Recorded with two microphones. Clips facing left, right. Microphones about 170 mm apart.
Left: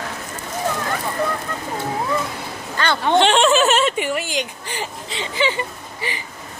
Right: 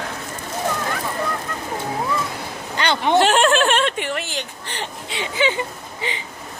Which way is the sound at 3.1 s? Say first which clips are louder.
Left 1 dB; 5° right (ahead or behind).